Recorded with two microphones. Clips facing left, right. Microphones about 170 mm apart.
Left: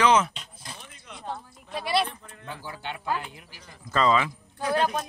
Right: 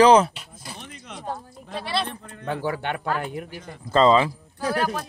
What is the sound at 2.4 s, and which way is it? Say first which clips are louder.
Speech: right 11 dB; 75° right (ahead or behind).